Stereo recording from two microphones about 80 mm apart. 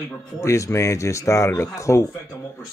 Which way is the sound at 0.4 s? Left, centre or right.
Left.